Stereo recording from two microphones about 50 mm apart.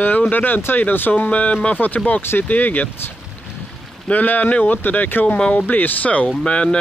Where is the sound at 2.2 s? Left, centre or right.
Left.